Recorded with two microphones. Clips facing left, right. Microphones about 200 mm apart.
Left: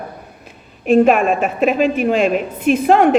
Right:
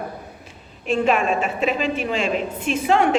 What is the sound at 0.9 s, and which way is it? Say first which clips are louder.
A woman's voice: left 7 dB; 55° left (ahead or behind).